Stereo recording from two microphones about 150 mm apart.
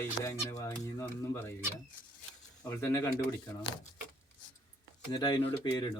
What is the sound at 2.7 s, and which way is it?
Speech, 15° left (ahead or behind).